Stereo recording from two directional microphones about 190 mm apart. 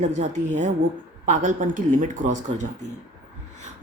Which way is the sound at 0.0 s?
40° right (ahead or behind).